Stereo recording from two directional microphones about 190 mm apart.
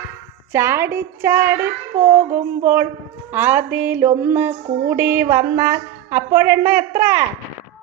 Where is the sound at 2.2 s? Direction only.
45° right (ahead or behind).